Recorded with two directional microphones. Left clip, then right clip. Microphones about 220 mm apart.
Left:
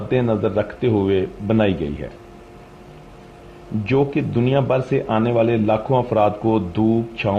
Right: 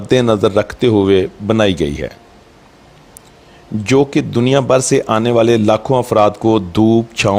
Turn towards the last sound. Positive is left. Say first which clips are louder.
# right 7 dB
turn(degrees=-55)  # may be behind; listen again after turning